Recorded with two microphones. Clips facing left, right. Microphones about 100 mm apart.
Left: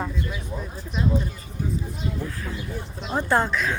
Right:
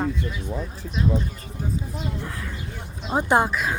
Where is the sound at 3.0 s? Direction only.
15° right (ahead or behind).